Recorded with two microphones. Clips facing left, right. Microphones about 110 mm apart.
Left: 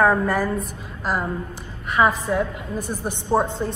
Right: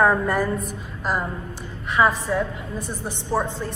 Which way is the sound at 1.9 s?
10° left (ahead or behind).